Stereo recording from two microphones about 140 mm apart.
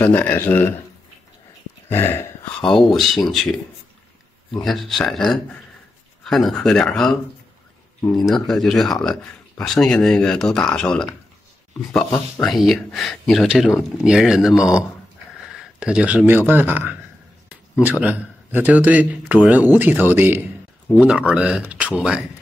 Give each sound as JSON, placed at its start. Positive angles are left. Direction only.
{"t": 0.0, "sound": "speech", "side_deg": 10}
{"t": 1.9, "sound": "a sound", "side_deg": 15}
{"t": 2.7, "sound": "speech", "side_deg": 5}
{"t": 4.6, "sound": "speech", "side_deg": 0}
{"t": 8.2, "sound": "speech", "side_deg": 0}
{"t": 18.0, "sound": "speech", "side_deg": -10}